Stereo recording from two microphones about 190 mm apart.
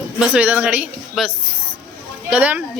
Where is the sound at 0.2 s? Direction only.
5° right (ahead or behind).